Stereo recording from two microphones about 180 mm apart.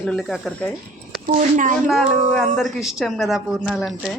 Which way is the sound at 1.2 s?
45° right (ahead or behind).